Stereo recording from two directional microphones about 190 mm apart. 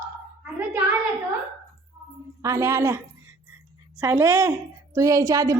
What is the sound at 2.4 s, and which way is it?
Speech, 15° right (ahead or behind).